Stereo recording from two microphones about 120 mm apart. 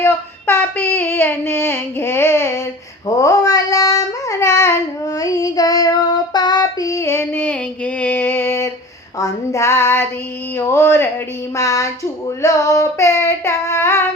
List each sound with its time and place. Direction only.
0.0 s child singing: 20° left (ahead or behind)